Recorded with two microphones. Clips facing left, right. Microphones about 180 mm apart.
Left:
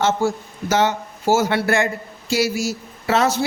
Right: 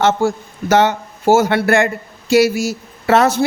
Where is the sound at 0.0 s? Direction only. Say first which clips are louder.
Right 4 dB; 60° right (ahead or behind).